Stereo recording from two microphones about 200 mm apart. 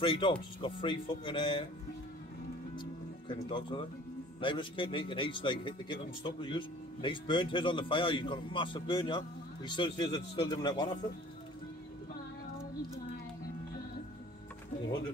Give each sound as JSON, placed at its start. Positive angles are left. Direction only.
{"t": 0.0, "sound": "speech", "side_deg": 25}
{"t": 2.8, "sound": "music", "side_deg": 25}
{"t": 4.4, "sound": "speech", "side_deg": 25}